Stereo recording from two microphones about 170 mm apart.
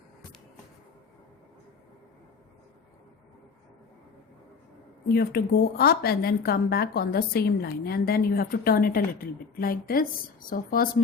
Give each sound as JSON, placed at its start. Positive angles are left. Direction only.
{"t": 5.0, "sound": "a woman's voice", "side_deg": 65}